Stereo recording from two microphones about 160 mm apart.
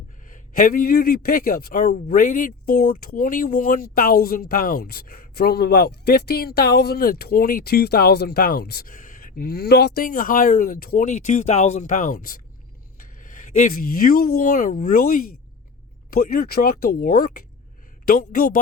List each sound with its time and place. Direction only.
0.3 s a man's voice: 55° left (ahead or behind)